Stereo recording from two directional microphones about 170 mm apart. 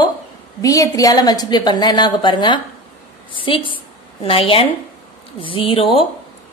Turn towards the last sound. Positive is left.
turn(degrees=30)  # may be behind; listen again after turning